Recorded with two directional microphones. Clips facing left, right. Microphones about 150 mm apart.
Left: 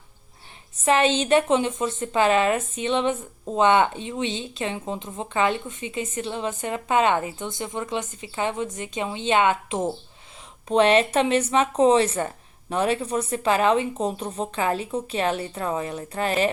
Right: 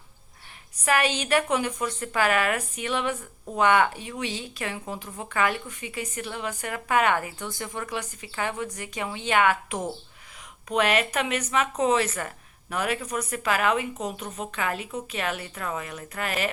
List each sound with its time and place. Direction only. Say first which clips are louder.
0.8 s a woman's voice: left 5 dB; 25° left (ahead or behind)